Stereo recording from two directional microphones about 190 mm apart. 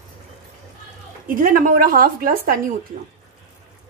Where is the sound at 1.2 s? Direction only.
45° right (ahead or behind).